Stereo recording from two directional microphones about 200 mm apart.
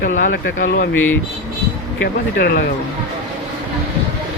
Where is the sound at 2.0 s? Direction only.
50° left (ahead or behind).